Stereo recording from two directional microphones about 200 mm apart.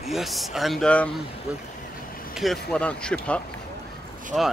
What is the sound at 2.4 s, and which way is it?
Speech, 5° left (ahead or behind).